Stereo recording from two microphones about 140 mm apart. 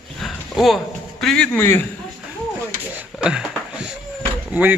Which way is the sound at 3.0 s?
5° right (ahead or behind).